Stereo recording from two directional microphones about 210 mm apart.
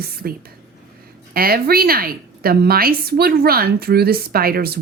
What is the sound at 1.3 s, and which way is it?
Speech, 45° right (ahead or behind).